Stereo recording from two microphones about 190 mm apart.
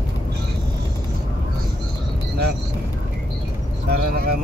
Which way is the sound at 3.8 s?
55° right (ahead or behind).